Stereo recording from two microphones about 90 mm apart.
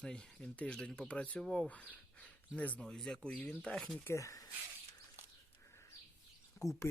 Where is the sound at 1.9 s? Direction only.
15° left (ahead or behind).